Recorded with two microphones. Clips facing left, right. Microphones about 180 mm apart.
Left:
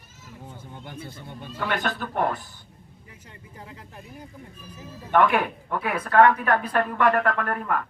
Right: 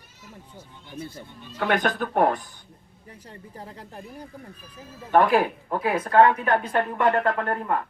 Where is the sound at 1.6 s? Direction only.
50° right (ahead or behind).